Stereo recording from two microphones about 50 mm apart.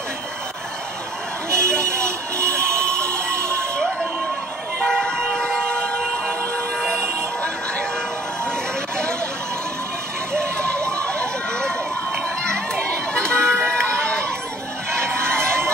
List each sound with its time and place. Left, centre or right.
1.5 s vehicle: right
2.7 s a sound: left
4.7 s vehicle: centre
6.8 s music: centre
10.3 s music: right
10.9 s crowd: centre
12.7 s run: centre
15.2 s crowd: centre